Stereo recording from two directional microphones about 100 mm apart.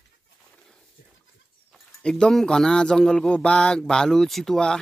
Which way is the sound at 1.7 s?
5° left (ahead or behind).